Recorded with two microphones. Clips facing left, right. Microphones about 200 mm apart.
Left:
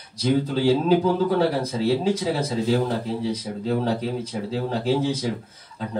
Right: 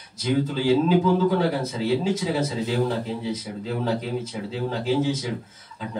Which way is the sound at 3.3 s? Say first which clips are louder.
Left 4 dB; 35° left (ahead or behind).